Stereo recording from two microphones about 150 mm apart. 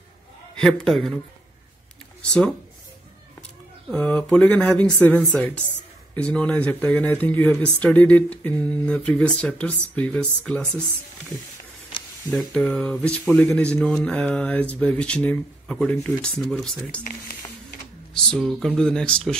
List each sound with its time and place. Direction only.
0.6 s speech: 5° left (ahead or behind)
3.9 s speech: 5° left (ahead or behind)
11.9 s sizzle: 35° left (ahead or behind)
12.3 s speech: 5° left (ahead or behind)
18.1 s speech: 5° left (ahead or behind)